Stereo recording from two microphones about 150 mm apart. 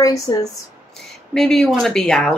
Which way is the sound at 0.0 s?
25° left (ahead or behind).